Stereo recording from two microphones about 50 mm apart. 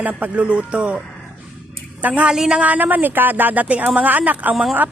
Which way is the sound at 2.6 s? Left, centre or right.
Right.